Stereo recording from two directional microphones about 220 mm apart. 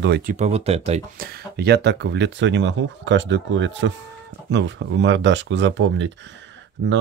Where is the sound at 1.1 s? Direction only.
45° right (ahead or behind).